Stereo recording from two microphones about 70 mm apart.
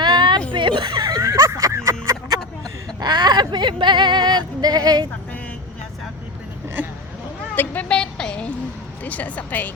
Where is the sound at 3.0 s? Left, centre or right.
Right.